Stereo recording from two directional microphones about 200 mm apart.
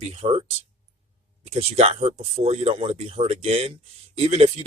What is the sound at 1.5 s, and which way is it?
Speech, 30° right (ahead or behind).